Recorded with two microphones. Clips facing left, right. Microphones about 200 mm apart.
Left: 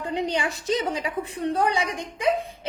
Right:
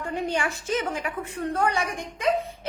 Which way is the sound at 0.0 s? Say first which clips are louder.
Left 2 dB; 15° left (ahead or behind).